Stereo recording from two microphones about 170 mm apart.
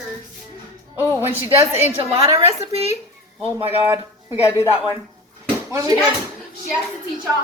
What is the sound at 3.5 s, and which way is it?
A woman's voice, 15° right (ahead or behind).